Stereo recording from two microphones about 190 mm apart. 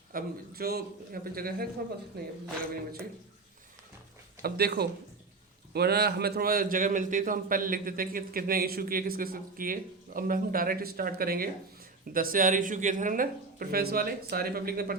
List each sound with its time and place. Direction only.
0.1 s a man's voice: 50° right (ahead or behind)
4.4 s a man's voice: 55° right (ahead or behind)